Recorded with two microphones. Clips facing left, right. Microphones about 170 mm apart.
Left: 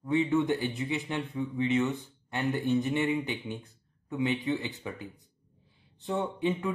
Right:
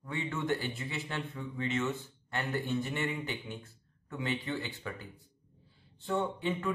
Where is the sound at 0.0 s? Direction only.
20° left (ahead or behind).